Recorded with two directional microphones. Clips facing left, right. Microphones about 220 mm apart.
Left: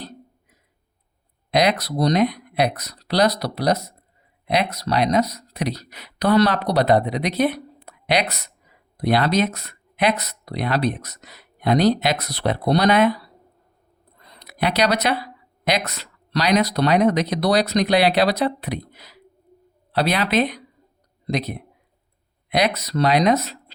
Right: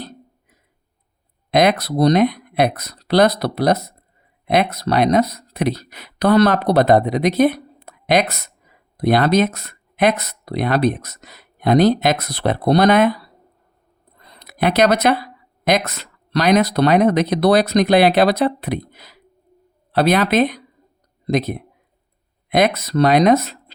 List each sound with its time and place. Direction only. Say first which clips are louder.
1.5 s speech: right 4 dB; 55° right (ahead or behind)
14.3 s a sound: right 4 dB; 50° right (ahead or behind)
15.6 s speech: right 5 dB; 50° right (ahead or behind)